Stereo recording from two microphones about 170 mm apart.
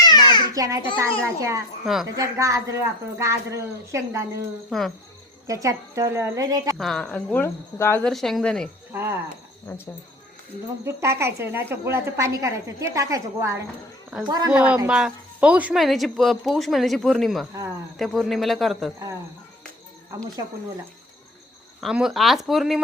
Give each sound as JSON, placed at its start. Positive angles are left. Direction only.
{"t": 0.0, "sound": "babbling", "side_deg": 25}
{"t": 0.5, "sound": "a child's voice", "side_deg": -20}
{"t": 1.8, "sound": "speech", "side_deg": 0}
{"t": 2.1, "sound": "a woman's voice", "side_deg": -20}
{"t": 5.5, "sound": "a woman's voice", "side_deg": -20}
{"t": 6.7, "sound": "cricket", "side_deg": 5}
{"t": 8.0, "sound": "speech", "side_deg": 0}
{"t": 8.9, "sound": "cricket", "side_deg": -15}
{"t": 10.8, "sound": "a woman's voice", "side_deg": -15}
{"t": 14.8, "sound": "speech", "side_deg": -5}
{"t": 21.8, "sound": "speech", "side_deg": 0}